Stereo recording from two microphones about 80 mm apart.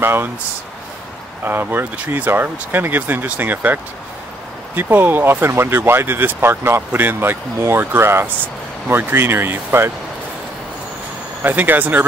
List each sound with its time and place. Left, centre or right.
0.0 s speech: right
1.4 s speech: right
11.4 s speech: right